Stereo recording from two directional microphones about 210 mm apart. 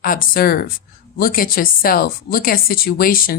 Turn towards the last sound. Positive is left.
turn(degrees=45)  # may be behind; listen again after turning